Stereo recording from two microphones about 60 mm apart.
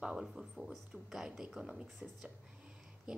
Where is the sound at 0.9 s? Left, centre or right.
Centre.